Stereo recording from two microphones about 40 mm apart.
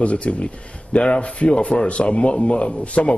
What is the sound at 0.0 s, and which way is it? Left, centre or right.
A man's voice, left.